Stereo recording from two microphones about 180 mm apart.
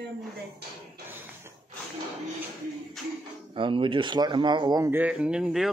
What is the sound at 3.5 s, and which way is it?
Speech, 30° right (ahead or behind).